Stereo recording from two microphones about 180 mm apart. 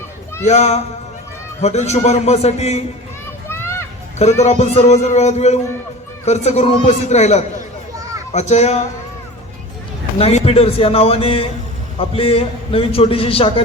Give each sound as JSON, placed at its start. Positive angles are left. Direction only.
{"t": 0.4, "sound": "a man's voice", "side_deg": 40}
{"t": 3.5, "sound": "a sound", "side_deg": 15}
{"t": 4.2, "sound": "a man's voice", "side_deg": 40}
{"t": 10.2, "sound": "a man's voice", "side_deg": 35}